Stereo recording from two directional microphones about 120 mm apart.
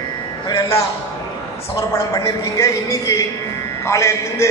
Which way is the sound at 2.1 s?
30° left (ahead or behind).